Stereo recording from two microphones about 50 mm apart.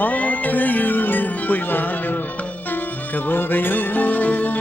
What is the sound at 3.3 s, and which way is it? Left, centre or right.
Music, left.